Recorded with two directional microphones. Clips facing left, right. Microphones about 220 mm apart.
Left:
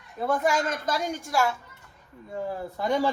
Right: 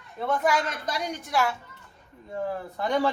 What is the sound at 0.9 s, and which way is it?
Speech, 45° left (ahead or behind).